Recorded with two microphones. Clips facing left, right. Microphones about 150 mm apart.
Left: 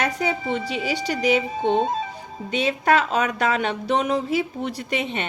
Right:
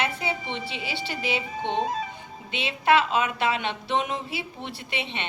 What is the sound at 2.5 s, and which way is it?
A woman's voice, 45° left (ahead or behind).